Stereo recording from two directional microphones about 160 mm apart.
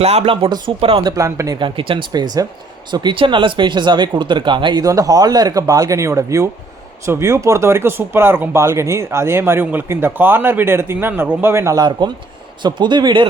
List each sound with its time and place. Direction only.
0.0 s speech: 40° right (ahead or behind)
1.1 s speech: 20° right (ahead or behind)